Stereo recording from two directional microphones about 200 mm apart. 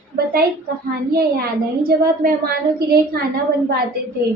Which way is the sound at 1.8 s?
50° right (ahead or behind).